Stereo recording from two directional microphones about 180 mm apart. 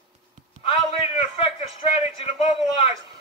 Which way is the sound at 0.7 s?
30° left (ahead or behind).